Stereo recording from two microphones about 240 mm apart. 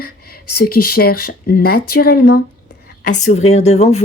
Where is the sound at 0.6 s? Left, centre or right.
Left.